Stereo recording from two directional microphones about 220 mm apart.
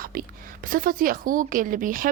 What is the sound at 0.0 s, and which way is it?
A woman's voice, 40° right (ahead or behind).